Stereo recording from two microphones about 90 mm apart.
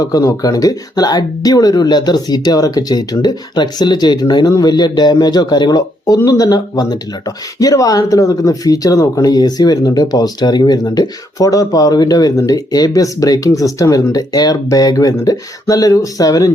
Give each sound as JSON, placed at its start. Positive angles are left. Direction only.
{"t": 0.0, "sound": "speech", "side_deg": 40}